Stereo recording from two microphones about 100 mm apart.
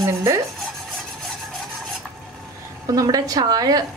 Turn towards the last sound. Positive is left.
turn(degrees=-40)  # may be behind; listen again after turning